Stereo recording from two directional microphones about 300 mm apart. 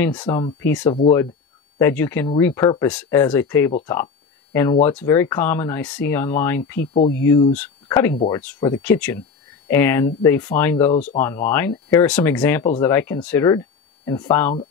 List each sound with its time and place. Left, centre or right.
0.0 s speech: centre
6.9 s speech: left
7.5 s speech: centre
10.9 s speech: left
11.1 s speech: centre